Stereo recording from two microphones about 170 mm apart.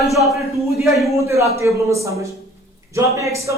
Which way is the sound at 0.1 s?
Centre (ahead or behind).